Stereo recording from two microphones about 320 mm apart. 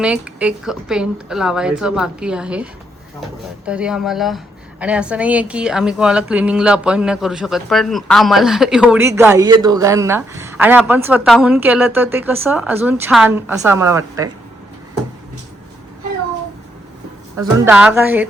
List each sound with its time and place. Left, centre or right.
0.0 s a woman's voice: centre
3.7 s a woman's voice: centre
17.3 s a woman's voice: centre